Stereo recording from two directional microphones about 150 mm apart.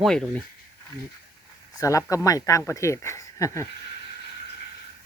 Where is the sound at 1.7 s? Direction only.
20° left (ahead or behind).